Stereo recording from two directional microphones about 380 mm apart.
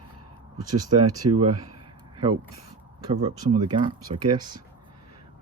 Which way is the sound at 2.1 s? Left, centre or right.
Centre.